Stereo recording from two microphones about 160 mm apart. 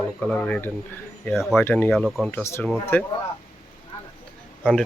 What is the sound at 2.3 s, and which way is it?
Speech, 15° left (ahead or behind).